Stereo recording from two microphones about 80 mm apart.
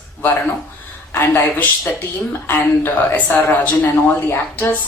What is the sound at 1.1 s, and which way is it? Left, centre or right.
A man's voice, left.